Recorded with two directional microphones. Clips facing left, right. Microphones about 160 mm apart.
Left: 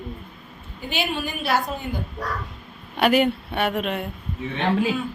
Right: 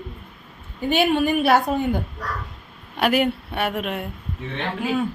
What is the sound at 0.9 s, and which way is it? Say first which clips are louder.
Speech: right 9 dB; 55° right (ahead or behind).